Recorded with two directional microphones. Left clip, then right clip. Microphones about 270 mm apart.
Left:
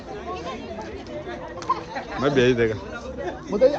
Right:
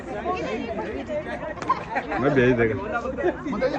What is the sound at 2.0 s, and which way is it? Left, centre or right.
Speech, centre.